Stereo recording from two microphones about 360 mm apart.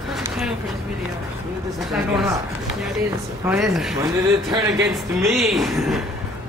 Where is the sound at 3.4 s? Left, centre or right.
Centre.